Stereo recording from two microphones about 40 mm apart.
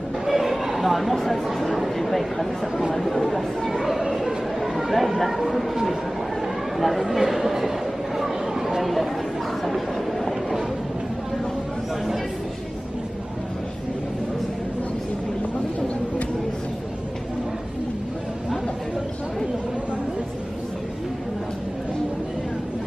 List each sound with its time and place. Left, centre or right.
0.3 s chatter: centre
1.1 s speech: centre
6.4 s speech: centre
8.2 s a sound: centre
9.7 s train: centre